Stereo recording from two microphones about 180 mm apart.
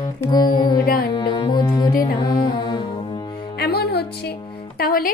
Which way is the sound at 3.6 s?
60° left (ahead or behind).